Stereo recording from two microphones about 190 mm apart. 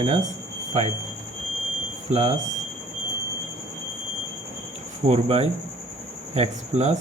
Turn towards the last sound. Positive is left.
turn(degrees=-35)  # may be behind; listen again after turning